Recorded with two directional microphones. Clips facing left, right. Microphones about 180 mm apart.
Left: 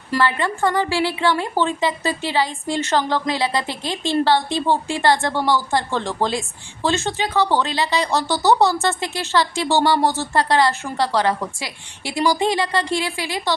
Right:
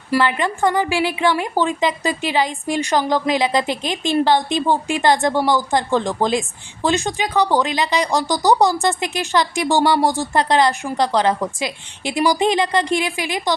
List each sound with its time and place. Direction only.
0.1 s speech: 15° right (ahead or behind)